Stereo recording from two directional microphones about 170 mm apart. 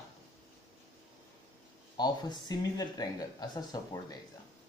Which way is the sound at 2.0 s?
25° left (ahead or behind).